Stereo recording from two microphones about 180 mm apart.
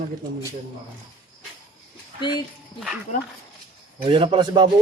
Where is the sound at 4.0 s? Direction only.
25° right (ahead or behind).